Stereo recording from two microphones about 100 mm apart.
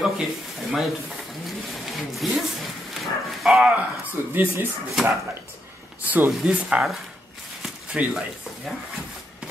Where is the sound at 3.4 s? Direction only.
Centre (ahead or behind).